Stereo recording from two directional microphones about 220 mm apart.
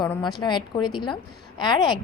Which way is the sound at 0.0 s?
20° left (ahead or behind).